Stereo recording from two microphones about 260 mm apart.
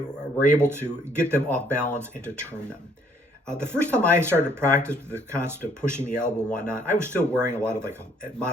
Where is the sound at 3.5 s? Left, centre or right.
Centre.